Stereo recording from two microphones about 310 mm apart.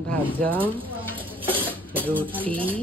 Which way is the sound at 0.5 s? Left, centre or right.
Centre.